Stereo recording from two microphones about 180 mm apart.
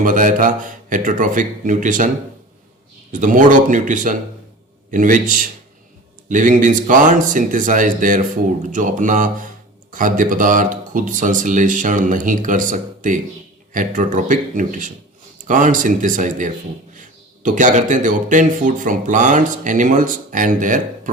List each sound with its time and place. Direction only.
0.0 s speech: 45° right (ahead or behind)
3.1 s speech: 45° right (ahead or behind)